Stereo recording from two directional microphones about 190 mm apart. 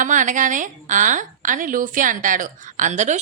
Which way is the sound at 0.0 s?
40° right (ahead or behind).